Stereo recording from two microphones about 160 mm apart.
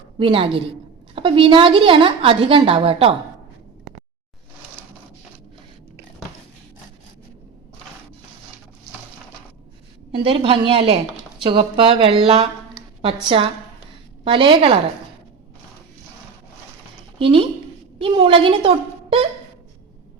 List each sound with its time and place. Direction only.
0.2 s a woman's voice: 35° right (ahead or behind)
10.1 s a woman's voice: 35° right (ahead or behind)
17.2 s a woman's voice: 35° right (ahead or behind)